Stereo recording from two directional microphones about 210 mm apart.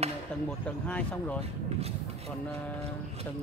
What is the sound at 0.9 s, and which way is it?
Speech, 5° left (ahead or behind).